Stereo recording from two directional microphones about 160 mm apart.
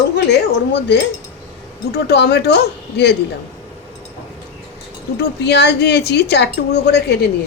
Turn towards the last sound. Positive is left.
turn(degrees=90)